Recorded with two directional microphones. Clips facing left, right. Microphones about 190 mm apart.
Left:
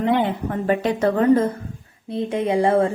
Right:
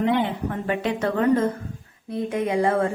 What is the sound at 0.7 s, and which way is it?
Speech, 40° left (ahead or behind).